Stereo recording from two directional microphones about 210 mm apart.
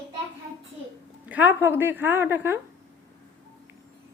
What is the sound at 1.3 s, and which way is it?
A woman's voice, 5° right (ahead or behind).